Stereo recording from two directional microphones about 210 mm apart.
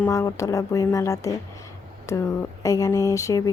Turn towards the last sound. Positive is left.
turn(degrees=15)  # may be behind; listen again after turning